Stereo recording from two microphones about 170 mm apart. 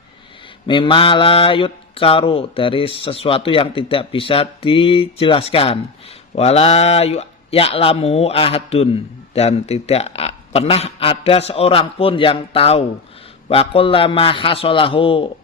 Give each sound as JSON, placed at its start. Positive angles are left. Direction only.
{"t": 0.7, "sound": "speech", "side_deg": 30}